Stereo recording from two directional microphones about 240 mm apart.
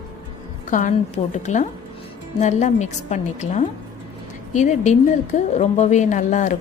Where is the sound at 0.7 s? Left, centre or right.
Left.